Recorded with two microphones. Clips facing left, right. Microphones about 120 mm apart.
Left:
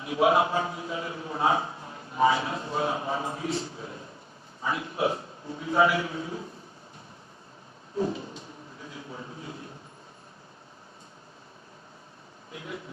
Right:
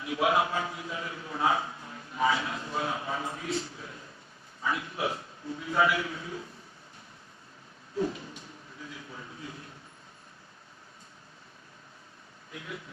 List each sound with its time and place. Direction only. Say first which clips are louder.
0.0 s a man's voice: left 4 dB; 25° left (ahead or behind)
7.9 s a man's voice: left 2 dB; 30° left (ahead or behind)
8.8 s a sound: left 3 dB; 30° left (ahead or behind)